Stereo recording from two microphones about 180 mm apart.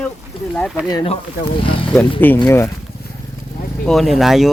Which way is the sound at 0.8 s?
20° left (ahead or behind).